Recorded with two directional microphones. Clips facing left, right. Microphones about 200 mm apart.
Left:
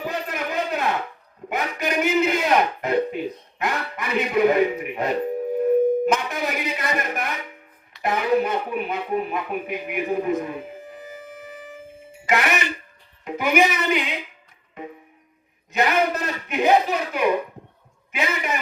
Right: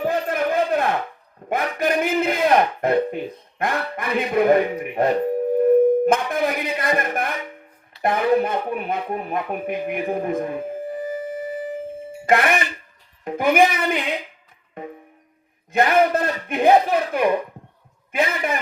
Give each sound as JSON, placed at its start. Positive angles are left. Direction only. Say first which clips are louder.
{"t": 0.0, "sound": "a sound", "louder": "right 6 dB", "side_deg": -55}
{"t": 5.5, "sound": "dial tone", "louder": "right 3 dB", "side_deg": -50}
{"t": 6.7, "sound": "speech", "louder": "right 4 dB", "side_deg": -55}
{"t": 10.1, "sound": "music", "louder": "left 2 dB", "side_deg": -50}
{"t": 12.2, "sound": "a woman's voice", "louder": "right 3 dB", "side_deg": -55}
{"t": 15.7, "sound": "a man's voice", "louder": "right 4 dB", "side_deg": -55}